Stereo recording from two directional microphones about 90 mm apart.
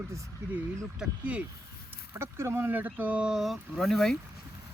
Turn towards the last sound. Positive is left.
turn(degrees=5)  # may be behind; listen again after turning